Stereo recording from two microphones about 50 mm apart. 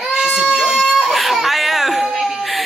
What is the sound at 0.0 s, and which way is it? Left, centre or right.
Baby cry, centre.